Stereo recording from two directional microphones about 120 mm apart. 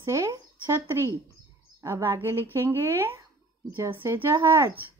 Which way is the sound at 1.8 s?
20° right (ahead or behind).